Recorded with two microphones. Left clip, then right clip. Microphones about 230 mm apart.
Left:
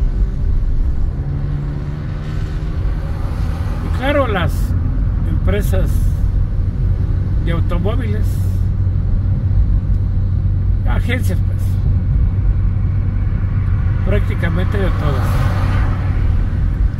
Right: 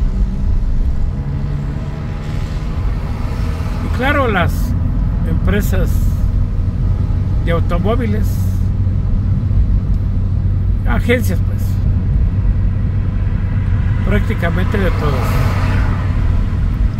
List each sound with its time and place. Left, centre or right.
4.0 s vehicle: centre
5.5 s vehicle: centre
7.4 s speech: centre
10.9 s speech: centre
14.1 s speech: centre